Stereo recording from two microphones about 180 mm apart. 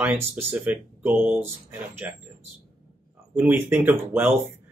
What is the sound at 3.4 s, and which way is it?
Speech, 10° right (ahead or behind).